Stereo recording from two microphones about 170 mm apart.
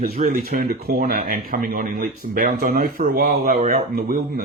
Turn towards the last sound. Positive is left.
turn(degrees=-60)  # may be behind; listen again after turning